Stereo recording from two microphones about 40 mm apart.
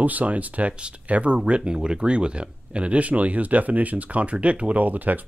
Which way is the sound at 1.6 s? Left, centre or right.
Right.